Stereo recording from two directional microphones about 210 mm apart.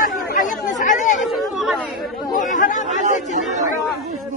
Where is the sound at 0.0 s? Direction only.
40° left (ahead or behind).